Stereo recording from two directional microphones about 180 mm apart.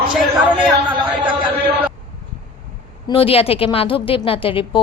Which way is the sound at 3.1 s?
30° left (ahead or behind).